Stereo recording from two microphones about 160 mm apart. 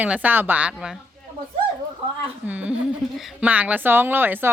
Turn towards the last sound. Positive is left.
turn(degrees=-10)  # may be behind; listen again after turning